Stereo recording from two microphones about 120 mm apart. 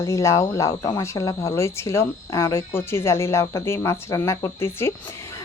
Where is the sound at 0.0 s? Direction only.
25° left (ahead or behind).